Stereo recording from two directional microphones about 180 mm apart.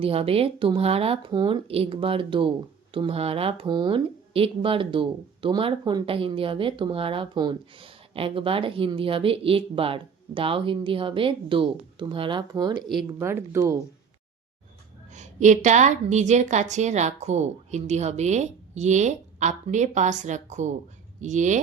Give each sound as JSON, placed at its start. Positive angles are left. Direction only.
{"t": 0.0, "sound": "a woman's voice", "side_deg": -30}
{"t": 15.1, "sound": "a woman's voice", "side_deg": -40}